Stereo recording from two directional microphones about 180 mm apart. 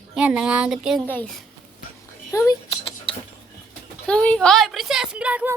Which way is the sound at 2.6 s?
30° left (ahead or behind).